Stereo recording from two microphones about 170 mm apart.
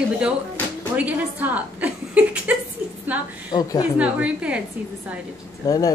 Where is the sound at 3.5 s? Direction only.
25° left (ahead or behind).